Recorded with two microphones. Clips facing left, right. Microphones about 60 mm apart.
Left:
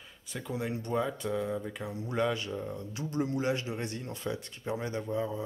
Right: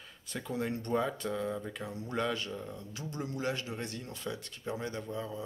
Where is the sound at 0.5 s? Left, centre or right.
Centre.